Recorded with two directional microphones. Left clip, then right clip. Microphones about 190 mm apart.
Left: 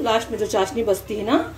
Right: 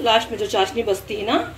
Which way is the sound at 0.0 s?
15° left (ahead or behind).